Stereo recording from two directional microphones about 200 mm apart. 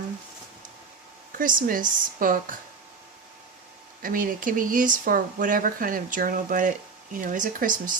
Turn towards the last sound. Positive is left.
turn(degrees=-40)  # may be behind; listen again after turning